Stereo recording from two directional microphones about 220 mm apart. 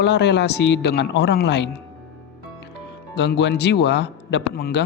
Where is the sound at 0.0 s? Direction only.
50° left (ahead or behind).